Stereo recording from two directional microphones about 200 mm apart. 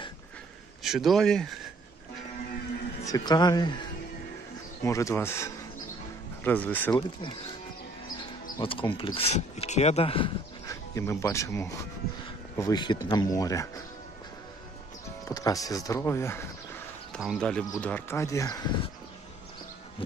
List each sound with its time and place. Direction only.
0.8 s a man's voice: centre (ahead or behind)
3.1 s speech: 20° left (ahead or behind)
4.8 s speech: 15° left (ahead or behind)
8.5 s speech: 25° left (ahead or behind)
10.7 s speech: 15° left (ahead or behind)
15.2 s speech: 15° left (ahead or behind)
17.1 s speech: centre (ahead or behind); by 18.8 s 20° left (ahead or behind)